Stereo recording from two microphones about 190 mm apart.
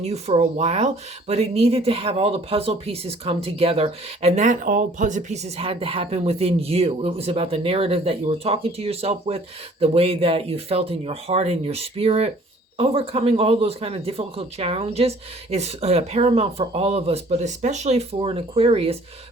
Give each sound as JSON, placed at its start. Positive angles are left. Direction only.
{"t": 0.0, "sound": "speech", "side_deg": -35}